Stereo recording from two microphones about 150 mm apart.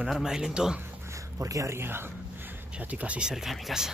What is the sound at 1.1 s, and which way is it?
Speech, 20° right (ahead or behind).